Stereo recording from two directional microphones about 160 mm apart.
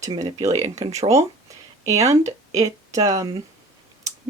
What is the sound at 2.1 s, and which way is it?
Speech, 20° right (ahead or behind).